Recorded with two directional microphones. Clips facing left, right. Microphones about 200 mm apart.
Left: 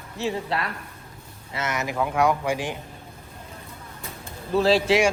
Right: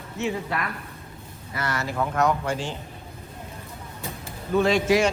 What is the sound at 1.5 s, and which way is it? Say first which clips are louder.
Speech: left 1 dB; 20° left (ahead or behind).